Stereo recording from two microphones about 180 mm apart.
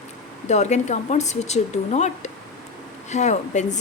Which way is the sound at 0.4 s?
40° left (ahead or behind).